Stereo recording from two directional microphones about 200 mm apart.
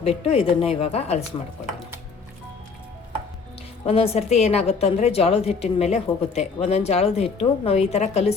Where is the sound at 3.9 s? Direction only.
30° left (ahead or behind).